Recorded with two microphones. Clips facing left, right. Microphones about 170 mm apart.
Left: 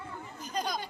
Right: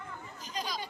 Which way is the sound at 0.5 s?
55° left (ahead or behind).